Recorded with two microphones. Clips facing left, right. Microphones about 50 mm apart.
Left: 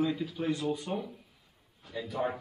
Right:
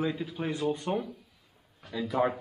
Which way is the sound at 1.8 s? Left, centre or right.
Right.